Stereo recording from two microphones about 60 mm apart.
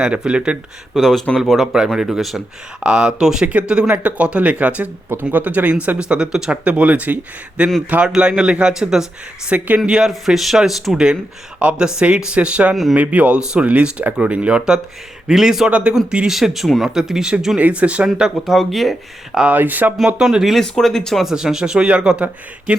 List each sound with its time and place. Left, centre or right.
0.0 s speech: centre
0.9 s speech: centre
2.8 s speech: centre
9.5 s speech: right
10.1 s speech: centre
11.6 s speech: right
12.7 s speech: centre
13.0 s speech: right
18.2 s speech: centre
19.5 s speech: right
20.4 s speech: centre
21.2 s speech: centre